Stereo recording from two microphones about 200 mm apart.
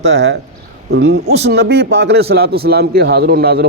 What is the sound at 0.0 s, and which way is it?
A man's voice, 60° right (ahead or behind).